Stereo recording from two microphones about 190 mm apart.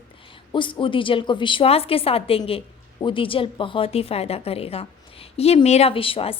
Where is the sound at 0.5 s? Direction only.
25° left (ahead or behind).